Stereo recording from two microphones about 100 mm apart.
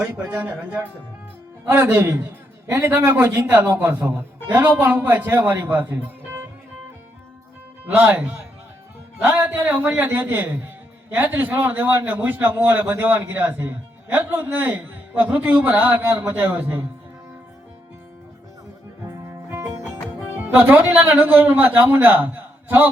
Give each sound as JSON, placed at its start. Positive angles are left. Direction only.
{"t": 0.0, "sound": "a man's voice", "side_deg": -10}
{"t": 7.9, "sound": "a man's voice", "side_deg": -15}
{"t": 19.0, "sound": "music", "side_deg": -30}
{"t": 20.4, "sound": "a man's voice", "side_deg": -15}